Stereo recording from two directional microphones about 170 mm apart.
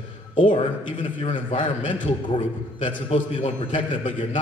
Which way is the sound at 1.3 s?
50° left (ahead or behind).